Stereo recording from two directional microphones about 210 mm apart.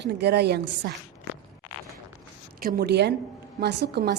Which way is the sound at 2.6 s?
45° right (ahead or behind).